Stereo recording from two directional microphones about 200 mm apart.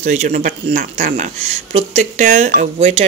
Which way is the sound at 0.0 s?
35° right (ahead or behind).